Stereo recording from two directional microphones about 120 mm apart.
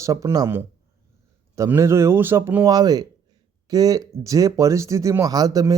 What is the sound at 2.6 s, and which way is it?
Speech, 30° right (ahead or behind).